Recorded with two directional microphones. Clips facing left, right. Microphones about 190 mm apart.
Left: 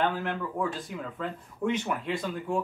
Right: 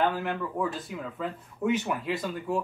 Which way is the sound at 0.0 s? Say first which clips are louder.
Right 1 dB; 5° right (ahead or behind).